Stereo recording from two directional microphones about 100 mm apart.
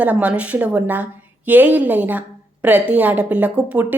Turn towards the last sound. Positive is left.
turn(degrees=-15)  # may be behind; listen again after turning